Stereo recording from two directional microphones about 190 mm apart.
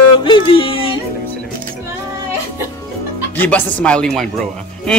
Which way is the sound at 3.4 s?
10° left (ahead or behind).